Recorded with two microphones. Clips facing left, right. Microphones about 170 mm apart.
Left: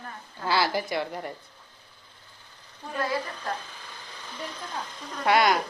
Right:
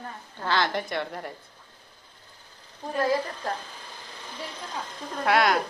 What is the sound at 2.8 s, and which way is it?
Speech, 40° right (ahead or behind).